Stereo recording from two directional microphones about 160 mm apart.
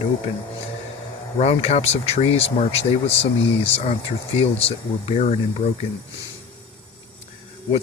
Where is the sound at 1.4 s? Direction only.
40° left (ahead or behind).